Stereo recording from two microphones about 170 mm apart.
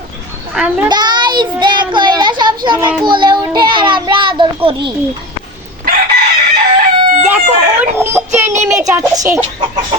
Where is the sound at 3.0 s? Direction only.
25° right (ahead or behind).